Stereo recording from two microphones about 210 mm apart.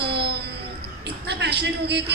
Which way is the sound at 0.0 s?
50° right (ahead or behind).